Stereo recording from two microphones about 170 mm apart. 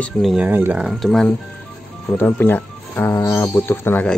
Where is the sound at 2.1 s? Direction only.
10° left (ahead or behind).